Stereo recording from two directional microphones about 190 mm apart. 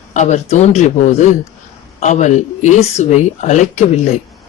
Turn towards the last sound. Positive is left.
turn(degrees=35)  # may be behind; listen again after turning